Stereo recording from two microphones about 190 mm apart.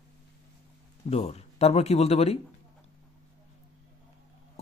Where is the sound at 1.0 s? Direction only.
30° left (ahead or behind).